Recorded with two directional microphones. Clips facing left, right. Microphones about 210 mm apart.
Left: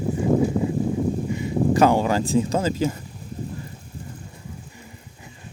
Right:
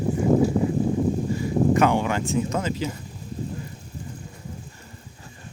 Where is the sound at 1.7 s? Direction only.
35° left (ahead or behind).